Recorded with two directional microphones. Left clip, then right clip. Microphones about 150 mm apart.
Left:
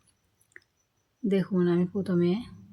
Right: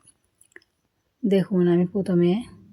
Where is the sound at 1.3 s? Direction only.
25° right (ahead or behind).